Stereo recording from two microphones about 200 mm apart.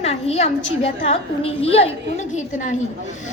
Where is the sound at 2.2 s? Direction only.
35° left (ahead or behind).